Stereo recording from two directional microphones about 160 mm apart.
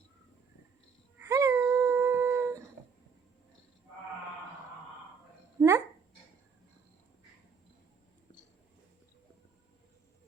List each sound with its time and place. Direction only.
1.3 s a sound: 20° right (ahead or behind)
1.7 s dog: 15° right (ahead or behind)
5.5 s dog: 15° right (ahead or behind)